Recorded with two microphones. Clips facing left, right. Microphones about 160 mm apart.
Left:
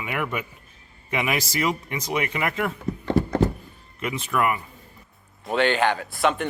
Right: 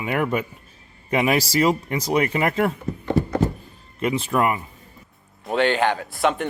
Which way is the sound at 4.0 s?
30° right (ahead or behind).